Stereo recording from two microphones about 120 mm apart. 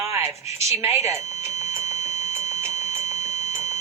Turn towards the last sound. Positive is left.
turn(degrees=-25)  # may be behind; listen again after turning